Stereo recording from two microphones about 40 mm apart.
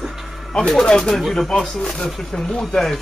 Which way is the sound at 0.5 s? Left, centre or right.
Centre.